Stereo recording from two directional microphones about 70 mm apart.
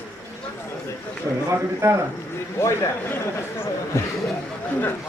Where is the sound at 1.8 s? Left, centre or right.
Right.